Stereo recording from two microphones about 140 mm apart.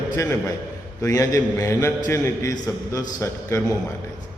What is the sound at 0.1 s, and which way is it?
A man's voice, 20° left (ahead or behind).